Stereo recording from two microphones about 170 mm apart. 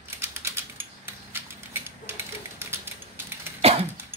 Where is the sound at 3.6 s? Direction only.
35° right (ahead or behind).